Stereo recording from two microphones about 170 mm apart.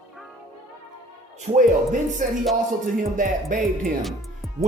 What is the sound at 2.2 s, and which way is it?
Speech, 55° right (ahead or behind).